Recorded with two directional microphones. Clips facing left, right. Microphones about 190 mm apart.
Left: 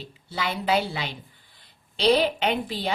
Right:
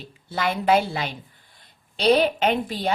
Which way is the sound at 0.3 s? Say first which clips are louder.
Right 5 dB; 50° right (ahead or behind).